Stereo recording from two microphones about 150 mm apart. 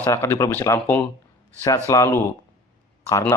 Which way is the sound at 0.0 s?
15° left (ahead or behind).